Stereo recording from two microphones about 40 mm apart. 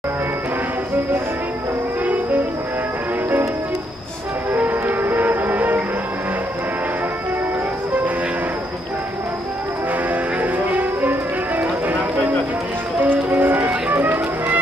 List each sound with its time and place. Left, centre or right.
4.6 s music: right
10.4 s music: right
13.0 s music: right